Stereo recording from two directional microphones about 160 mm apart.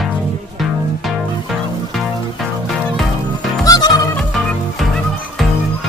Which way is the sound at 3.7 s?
25° left (ahead or behind).